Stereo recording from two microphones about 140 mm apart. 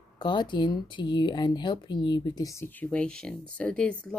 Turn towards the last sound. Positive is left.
turn(degrees=10)  # may be behind; listen again after turning